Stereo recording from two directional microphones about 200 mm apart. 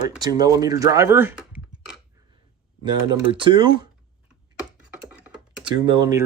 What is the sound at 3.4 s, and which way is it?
Speech, 25° right (ahead or behind).